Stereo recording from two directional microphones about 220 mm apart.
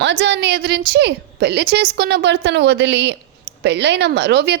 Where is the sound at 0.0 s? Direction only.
50° right (ahead or behind).